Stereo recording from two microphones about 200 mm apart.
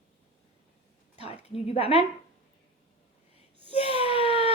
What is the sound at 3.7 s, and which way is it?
Speech, 30° left (ahead or behind).